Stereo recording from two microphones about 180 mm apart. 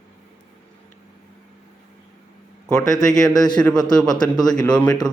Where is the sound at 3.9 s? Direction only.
5° left (ahead or behind).